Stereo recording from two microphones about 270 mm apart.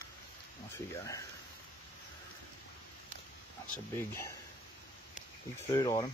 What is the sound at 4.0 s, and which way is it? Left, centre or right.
Speech, centre.